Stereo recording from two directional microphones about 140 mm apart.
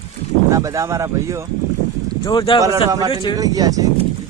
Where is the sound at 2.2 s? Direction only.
35° left (ahead or behind).